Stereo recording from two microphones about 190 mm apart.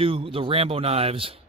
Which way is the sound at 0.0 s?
30° right (ahead or behind).